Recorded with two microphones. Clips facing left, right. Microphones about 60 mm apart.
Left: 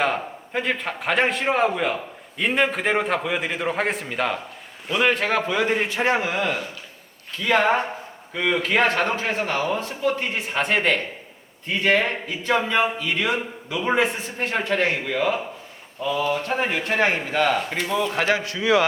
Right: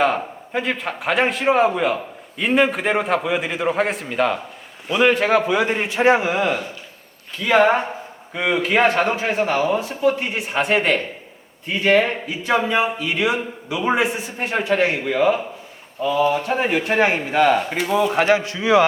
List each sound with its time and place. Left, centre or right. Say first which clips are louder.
0.0 s a man's voice: right 4 dB; centre
18.1 s a man's voice: right 5 dB; right